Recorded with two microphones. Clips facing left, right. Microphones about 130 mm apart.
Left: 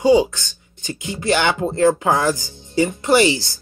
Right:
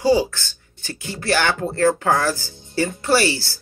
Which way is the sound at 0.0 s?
20° left (ahead or behind).